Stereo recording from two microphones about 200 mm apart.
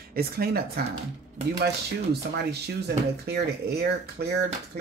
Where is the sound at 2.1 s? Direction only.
55° right (ahead or behind).